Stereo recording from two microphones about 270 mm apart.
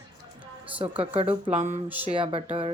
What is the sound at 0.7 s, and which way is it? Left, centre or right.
Speech, centre.